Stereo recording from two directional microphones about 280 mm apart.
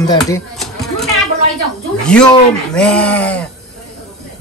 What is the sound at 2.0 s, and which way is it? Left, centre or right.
Speech, centre.